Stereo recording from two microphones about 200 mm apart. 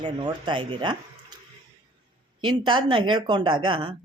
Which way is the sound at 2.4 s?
25° right (ahead or behind).